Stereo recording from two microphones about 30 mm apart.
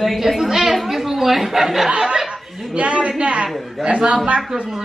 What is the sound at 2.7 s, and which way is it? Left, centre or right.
A woman's voice, right.